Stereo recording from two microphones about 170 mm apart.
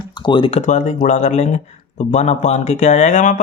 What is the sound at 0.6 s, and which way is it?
Speech, 45° left (ahead or behind).